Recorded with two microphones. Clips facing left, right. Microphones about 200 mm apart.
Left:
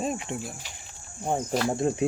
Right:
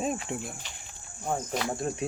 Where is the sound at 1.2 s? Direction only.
25° left (ahead or behind).